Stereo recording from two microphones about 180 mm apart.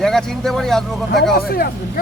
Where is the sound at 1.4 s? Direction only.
55° left (ahead or behind).